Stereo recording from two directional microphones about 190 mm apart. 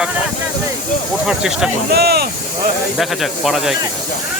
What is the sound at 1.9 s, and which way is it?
Speech, 55° right (ahead or behind).